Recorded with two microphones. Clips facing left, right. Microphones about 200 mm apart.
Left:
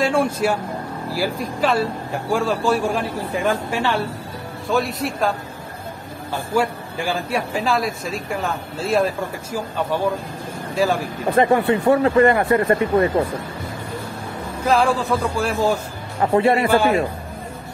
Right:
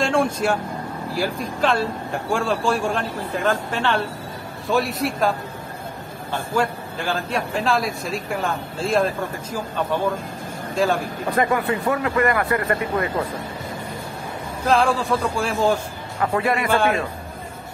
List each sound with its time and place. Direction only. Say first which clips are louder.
0.0 s speech: left 1 dB; 5° left (ahead or behind)
6.5 s speech: left 2 dB; 10° left (ahead or behind)
11.3 s speech: left 5 dB; 30° left (ahead or behind)
14.7 s speech: left 1 dB; centre (ahead or behind)
16.2 s speech: left 5 dB; 25° left (ahead or behind)
16.6 s speech: left 3 dB; 5° left (ahead or behind)